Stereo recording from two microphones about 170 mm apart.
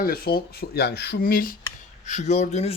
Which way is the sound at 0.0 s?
60° left (ahead or behind).